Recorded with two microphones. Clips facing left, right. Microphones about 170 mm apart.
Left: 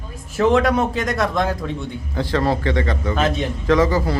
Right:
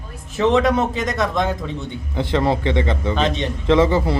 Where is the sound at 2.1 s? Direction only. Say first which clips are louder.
Right 1 dB; 20° right (ahead or behind).